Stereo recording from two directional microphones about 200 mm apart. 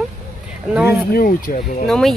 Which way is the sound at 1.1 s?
45° left (ahead or behind).